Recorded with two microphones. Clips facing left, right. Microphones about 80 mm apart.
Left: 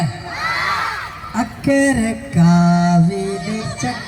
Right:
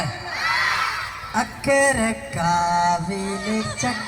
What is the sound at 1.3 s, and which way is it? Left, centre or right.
Mantra, centre.